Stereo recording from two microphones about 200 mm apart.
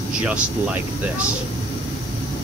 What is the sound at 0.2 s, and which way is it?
Speech, 5° right (ahead or behind).